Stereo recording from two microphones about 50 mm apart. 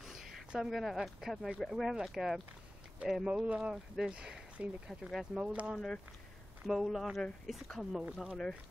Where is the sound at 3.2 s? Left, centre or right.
Right.